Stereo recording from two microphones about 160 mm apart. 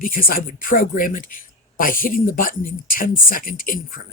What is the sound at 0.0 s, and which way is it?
Speech, 60° left (ahead or behind).